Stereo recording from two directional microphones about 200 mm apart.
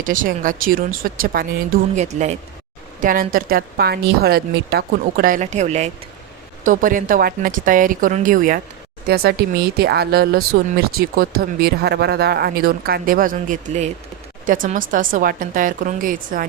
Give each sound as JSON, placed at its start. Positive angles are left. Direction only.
{"t": 0.0, "sound": "speech", "side_deg": -40}